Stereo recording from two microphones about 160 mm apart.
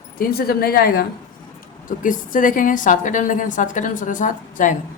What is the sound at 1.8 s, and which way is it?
A woman's voice, 55° left (ahead or behind).